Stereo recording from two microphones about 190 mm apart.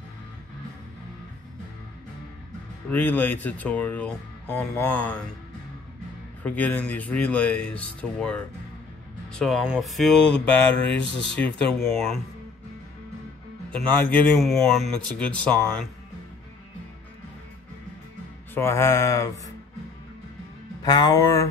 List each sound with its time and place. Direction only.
2.9 s speech: 10° left (ahead or behind)
6.4 s speech: 10° left (ahead or behind)
11.0 s speech: 65° left (ahead or behind)
11.3 s speech: 10° left (ahead or behind)
13.7 s speech: 5° left (ahead or behind)
18.5 s speech: 15° left (ahead or behind)
20.8 s speech: 20° left (ahead or behind)